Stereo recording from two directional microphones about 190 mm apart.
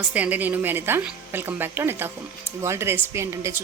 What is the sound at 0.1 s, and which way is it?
A woman's voice, 10° right (ahead or behind).